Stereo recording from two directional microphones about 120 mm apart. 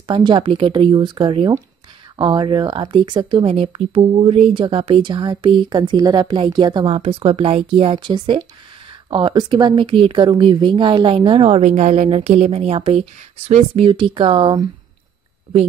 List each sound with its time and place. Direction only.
0.1 s speech: 40° right (ahead or behind)
7.0 s speech: 50° right (ahead or behind)
11.6 s a woman's voice: 65° right (ahead or behind); by 14.7 s 40° right (ahead or behind)